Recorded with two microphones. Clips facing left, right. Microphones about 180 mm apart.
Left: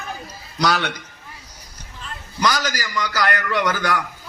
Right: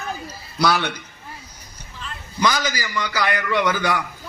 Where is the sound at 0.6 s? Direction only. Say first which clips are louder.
Right 1 dB; 15° right (ahead or behind).